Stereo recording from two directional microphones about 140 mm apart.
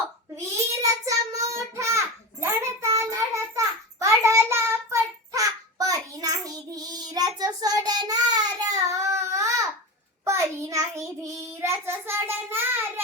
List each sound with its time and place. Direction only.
0.3 s child singing: 20° right (ahead or behind)